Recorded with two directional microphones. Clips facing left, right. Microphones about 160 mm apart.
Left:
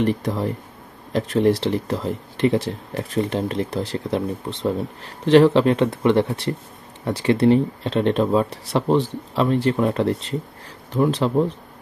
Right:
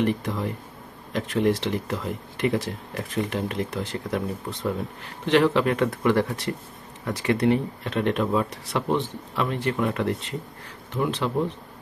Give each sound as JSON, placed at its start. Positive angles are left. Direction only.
{"t": 0.0, "sound": "speech", "side_deg": 35}